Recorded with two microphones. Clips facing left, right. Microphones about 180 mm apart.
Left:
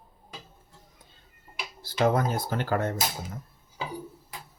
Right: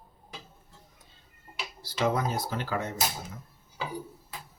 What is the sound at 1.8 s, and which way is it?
Speech, 50° left (ahead or behind).